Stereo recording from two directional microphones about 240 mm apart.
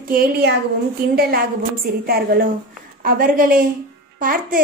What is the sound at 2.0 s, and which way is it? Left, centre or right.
A woman's voice, right.